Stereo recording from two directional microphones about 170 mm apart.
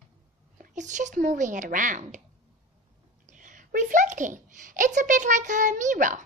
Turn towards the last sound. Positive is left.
turn(degrees=-50)  # may be behind; listen again after turning